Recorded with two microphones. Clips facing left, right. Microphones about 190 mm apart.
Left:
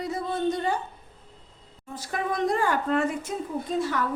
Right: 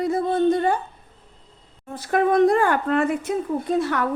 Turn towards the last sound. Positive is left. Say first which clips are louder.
# right 5 dB
turn(degrees=-65)  # may be behind; listen again after turning